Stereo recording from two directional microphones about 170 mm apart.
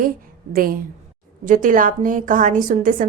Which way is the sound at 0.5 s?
60° right (ahead or behind).